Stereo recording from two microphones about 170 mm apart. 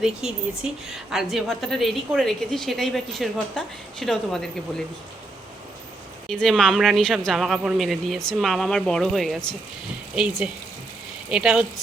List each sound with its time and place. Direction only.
0.2 s speech: 5° right (ahead or behind)
6.2 s speech: 5° left (ahead or behind)